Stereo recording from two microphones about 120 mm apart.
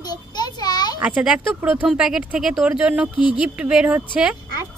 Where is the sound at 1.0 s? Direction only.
10° right (ahead or behind).